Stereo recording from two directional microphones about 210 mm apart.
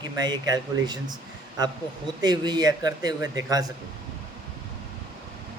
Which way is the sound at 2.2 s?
20° right (ahead or behind).